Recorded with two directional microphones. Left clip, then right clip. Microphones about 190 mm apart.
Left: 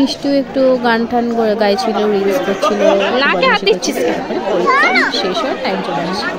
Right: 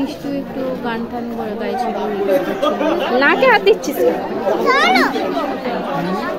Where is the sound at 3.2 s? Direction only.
15° right (ahead or behind).